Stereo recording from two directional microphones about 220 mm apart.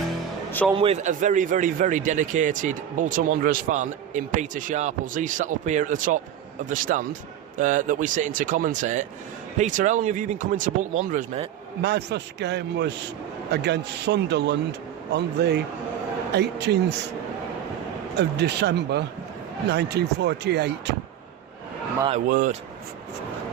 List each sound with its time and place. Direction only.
0.7 s a man's voice: 25° right (ahead or behind)
11.8 s a man's voice: 50° right (ahead or behind)
18.2 s a man's voice: 50° right (ahead or behind)
22.1 s a man's voice: 35° right (ahead or behind)